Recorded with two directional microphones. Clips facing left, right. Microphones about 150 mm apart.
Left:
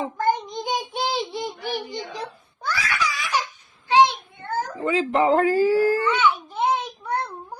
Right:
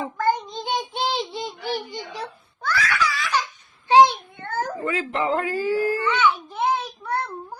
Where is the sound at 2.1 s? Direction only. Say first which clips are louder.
Even; 15° left (ahead or behind).